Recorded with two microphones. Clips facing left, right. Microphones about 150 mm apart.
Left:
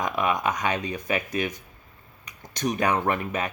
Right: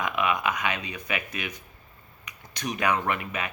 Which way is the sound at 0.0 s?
40° left (ahead or behind).